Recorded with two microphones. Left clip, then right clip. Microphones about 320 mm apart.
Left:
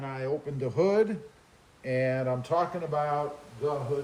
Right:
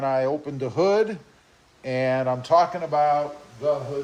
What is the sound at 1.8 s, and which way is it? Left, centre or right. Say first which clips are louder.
Speech: right 3 dB; right.